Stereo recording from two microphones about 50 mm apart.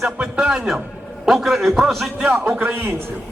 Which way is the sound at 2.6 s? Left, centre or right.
Right.